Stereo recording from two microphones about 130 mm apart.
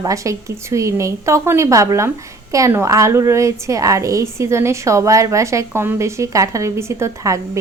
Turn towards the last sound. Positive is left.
turn(degrees=-25)  # may be behind; listen again after turning